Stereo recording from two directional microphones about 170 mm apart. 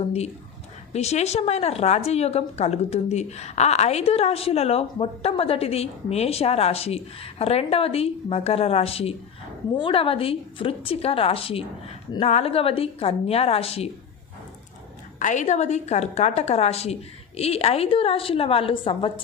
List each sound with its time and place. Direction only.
0.9 s speech: 40° left (ahead or behind)
15.2 s speech: 45° left (ahead or behind); by 19.2 s 30° left (ahead or behind)